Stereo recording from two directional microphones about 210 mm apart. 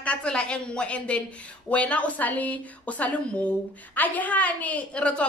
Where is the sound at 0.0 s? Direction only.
5° left (ahead or behind).